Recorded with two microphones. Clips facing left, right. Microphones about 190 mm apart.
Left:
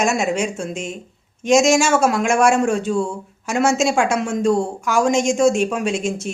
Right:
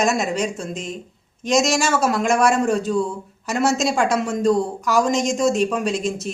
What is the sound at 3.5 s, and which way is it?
Speech, 50° left (ahead or behind).